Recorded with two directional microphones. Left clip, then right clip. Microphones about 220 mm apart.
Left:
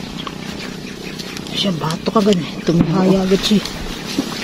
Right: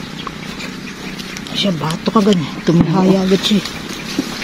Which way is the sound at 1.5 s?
40° right (ahead or behind).